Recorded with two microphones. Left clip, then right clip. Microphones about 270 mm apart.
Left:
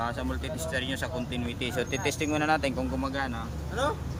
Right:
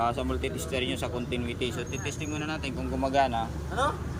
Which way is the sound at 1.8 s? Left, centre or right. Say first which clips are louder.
Left 6 dB; centre.